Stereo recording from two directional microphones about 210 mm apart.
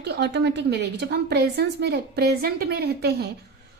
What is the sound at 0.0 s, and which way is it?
A woman's voice, 55° right (ahead or behind).